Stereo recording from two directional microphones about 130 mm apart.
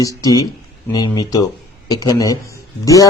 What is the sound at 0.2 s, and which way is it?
Speech, 30° left (ahead or behind).